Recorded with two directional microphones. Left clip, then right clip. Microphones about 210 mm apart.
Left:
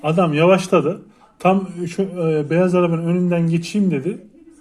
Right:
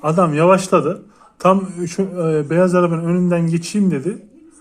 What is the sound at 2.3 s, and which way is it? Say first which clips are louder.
Speech: right 3 dB; 45° right (ahead or behind).